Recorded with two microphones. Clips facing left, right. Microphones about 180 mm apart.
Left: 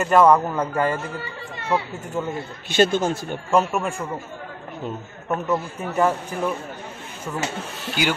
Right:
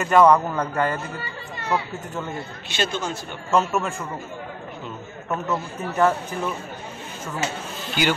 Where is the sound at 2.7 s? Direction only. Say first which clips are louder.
Left 8 dB; 50° left (ahead or behind).